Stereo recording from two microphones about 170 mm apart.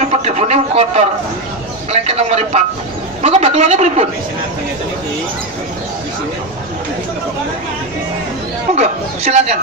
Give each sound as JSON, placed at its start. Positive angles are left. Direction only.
{"t": 0.1, "sound": "a man's voice", "side_deg": -40}
{"t": 1.9, "sound": "a sound", "side_deg": -40}
{"t": 8.7, "sound": "speech", "side_deg": -45}